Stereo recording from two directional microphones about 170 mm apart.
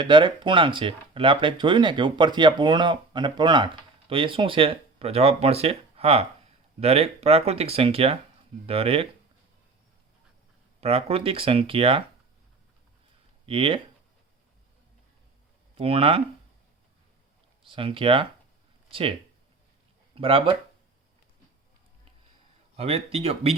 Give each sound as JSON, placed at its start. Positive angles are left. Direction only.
{"t": 0.0, "sound": "speech", "side_deg": -30}
{"t": 10.8, "sound": "speech", "side_deg": -35}
{"t": 13.4, "sound": "speech", "side_deg": -30}
{"t": 15.8, "sound": "speech", "side_deg": -35}
{"t": 17.6, "sound": "speech", "side_deg": -30}
{"t": 20.1, "sound": "speech", "side_deg": -30}
{"t": 22.8, "sound": "speech", "side_deg": -35}